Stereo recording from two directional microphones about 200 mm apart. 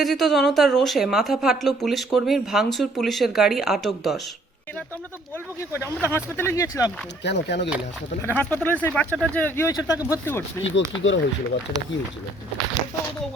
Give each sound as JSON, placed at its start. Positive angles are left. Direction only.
{"t": 0.0, "sound": "a woman's voice", "side_deg": 0}
{"t": 5.7, "sound": "speech", "side_deg": 10}
{"t": 7.3, "sound": "speech", "side_deg": 60}
{"t": 8.2, "sound": "speech", "side_deg": 10}
{"t": 10.6, "sound": "speech", "side_deg": 70}